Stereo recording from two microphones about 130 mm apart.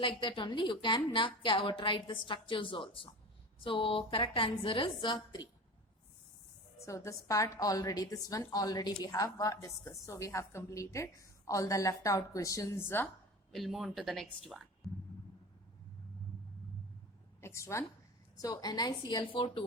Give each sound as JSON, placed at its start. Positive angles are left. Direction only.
{"t": 0.2, "sound": "a woman's voice", "side_deg": 40}
{"t": 6.8, "sound": "a woman's voice", "side_deg": 25}
{"t": 13.5, "sound": "speech", "side_deg": 0}
{"t": 17.4, "sound": "a woman's voice", "side_deg": 20}